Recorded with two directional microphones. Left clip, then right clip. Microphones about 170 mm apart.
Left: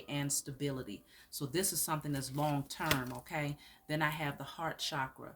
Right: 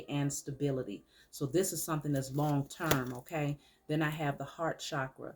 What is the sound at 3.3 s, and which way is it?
Speech, 45° left (ahead or behind).